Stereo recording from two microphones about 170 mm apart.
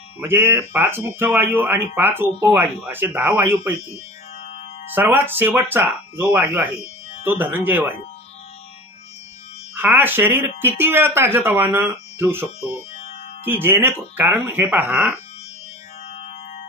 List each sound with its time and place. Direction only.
0.2 s speech: 15° right (ahead or behind)
4.9 s speech: 10° right (ahead or behind)
6.8 s music: 40° left (ahead or behind)
7.2 s speech: 10° right (ahead or behind)
9.8 s speech: 10° right (ahead or behind)
12.7 s music: 40° left (ahead or behind)
13.5 s speech: 15° right (ahead or behind)